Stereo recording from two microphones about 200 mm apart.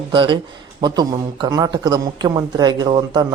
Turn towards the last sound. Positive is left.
turn(degrees=-25)  # may be behind; listen again after turning